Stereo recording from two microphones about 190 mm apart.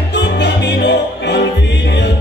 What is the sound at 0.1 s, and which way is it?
Music, 65° left (ahead or behind).